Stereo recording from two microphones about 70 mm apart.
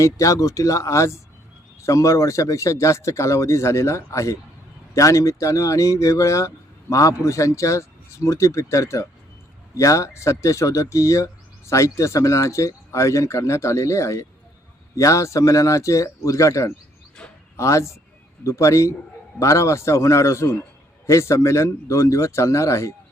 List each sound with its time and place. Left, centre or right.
0.0 s speech: left